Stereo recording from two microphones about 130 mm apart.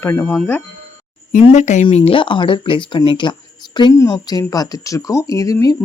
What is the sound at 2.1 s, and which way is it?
Speech, 40° left (ahead or behind).